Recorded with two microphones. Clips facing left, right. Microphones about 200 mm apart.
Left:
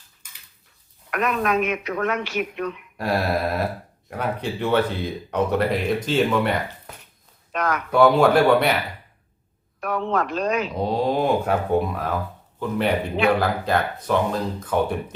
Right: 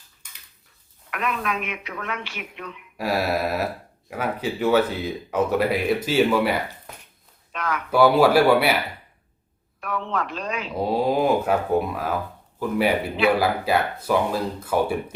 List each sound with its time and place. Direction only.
1.1 s speech: 45° left (ahead or behind)
3.0 s speech: 5° right (ahead or behind)
7.5 s a sound: 45° left (ahead or behind)
7.9 s speech: 5° right (ahead or behind)
9.8 s speech: 45° left (ahead or behind)
10.8 s speech: 5° right (ahead or behind)